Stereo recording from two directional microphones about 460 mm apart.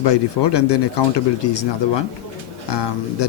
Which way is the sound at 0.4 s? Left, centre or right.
Left.